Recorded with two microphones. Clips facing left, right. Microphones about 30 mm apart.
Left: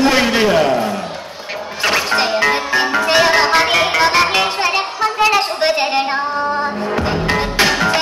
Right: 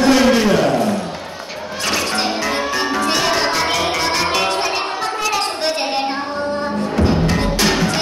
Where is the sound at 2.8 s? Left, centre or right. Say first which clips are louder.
Left 6 dB; centre.